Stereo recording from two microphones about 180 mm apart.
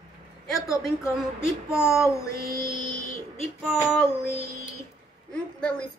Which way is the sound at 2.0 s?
15° left (ahead or behind).